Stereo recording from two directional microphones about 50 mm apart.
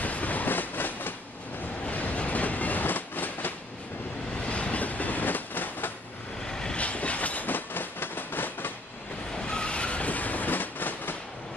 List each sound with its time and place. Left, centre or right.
0.0 s train: left
4.5 s train: left
6.5 s train: centre
6.8 s train: left
9.3 s train: centre; by 11.1 s left